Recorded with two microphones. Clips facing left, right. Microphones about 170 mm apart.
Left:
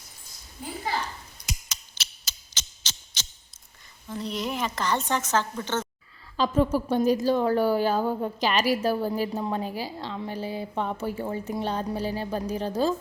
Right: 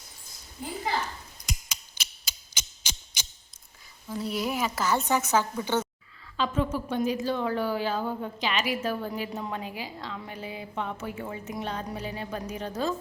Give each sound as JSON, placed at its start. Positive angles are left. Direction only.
{"t": 2.2, "sound": "a sound", "side_deg": -10}
{"t": 4.1, "sound": "speech", "side_deg": -5}
{"t": 6.3, "sound": "a woman's voice", "side_deg": 35}